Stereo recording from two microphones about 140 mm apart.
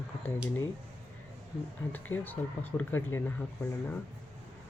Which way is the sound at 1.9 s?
15° left (ahead or behind).